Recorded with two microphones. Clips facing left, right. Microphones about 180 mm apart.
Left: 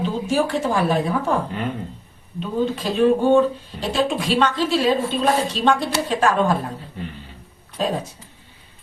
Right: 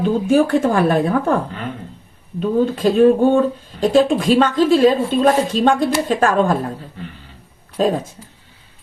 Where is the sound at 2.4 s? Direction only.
50° right (ahead or behind).